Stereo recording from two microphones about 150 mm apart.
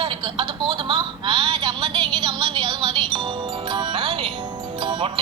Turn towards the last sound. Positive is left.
turn(degrees=-30)  # may be behind; listen again after turning